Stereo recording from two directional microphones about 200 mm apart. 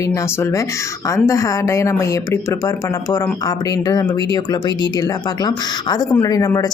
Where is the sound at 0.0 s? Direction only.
15° left (ahead or behind).